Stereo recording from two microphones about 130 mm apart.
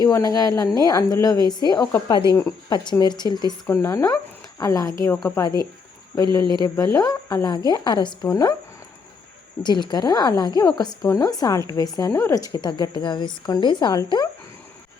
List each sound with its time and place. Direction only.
0.0 s a woman's voice: 25° left (ahead or behind)
6.2 s speech: 35° right (ahead or behind)
6.6 s a woman's voice: 25° left (ahead or behind)
9.6 s a woman's voice: 35° left (ahead or behind)